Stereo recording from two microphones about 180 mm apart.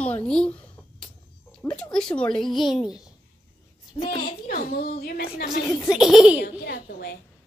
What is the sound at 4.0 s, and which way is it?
A woman's voice, 45° left (ahead or behind).